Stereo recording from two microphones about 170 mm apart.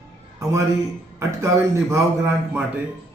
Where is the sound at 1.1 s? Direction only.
15° right (ahead or behind).